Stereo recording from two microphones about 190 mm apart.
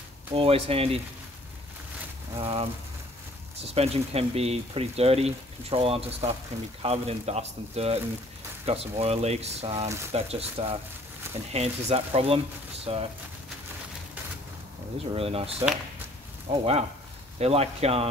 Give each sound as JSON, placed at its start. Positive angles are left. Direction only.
{"t": 0.3, "sound": "speech", "side_deg": -30}
{"t": 2.3, "sound": "speech", "side_deg": -30}
{"t": 15.1, "sound": "speech", "side_deg": -30}